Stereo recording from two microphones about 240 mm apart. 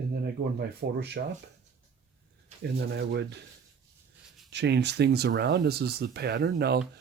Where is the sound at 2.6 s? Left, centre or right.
Right.